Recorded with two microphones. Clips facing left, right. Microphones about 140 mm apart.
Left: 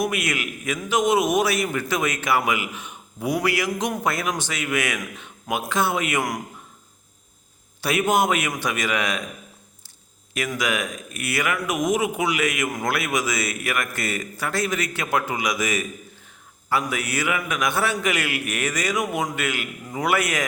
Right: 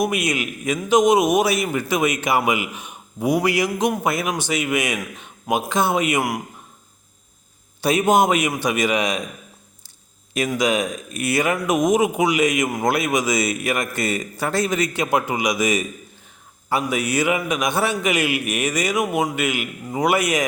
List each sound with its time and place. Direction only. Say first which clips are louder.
0.0 s a man's voice: right 3 dB; 15° right (ahead or behind)
7.8 s a man's voice: right 4 dB; 20° right (ahead or behind)
10.5 s a man's voice: right 6 dB; 20° right (ahead or behind)